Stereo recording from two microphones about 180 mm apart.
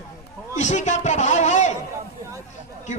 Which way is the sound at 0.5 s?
40° left (ahead or behind).